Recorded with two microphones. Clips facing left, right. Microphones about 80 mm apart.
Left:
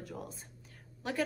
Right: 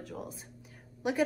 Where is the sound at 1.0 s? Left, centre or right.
Centre.